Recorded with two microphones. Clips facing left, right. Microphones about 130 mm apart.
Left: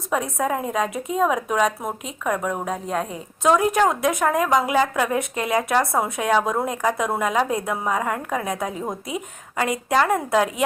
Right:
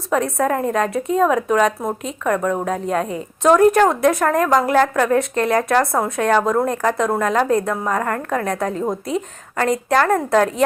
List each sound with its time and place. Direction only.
0.1 s a woman's voice: 5° left (ahead or behind)